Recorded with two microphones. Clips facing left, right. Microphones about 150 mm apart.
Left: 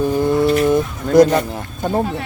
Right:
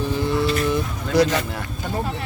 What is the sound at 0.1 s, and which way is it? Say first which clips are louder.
Vehicle: left 6 dB; 50° left (ahead or behind).